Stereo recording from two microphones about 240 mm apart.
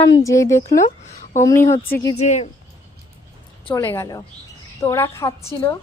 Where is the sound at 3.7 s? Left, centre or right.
Centre.